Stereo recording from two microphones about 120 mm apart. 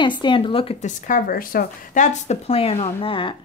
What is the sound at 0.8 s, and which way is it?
Speech, 90° left.